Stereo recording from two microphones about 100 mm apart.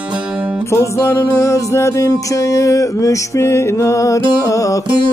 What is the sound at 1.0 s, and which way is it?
Music, 30° left (ahead or behind).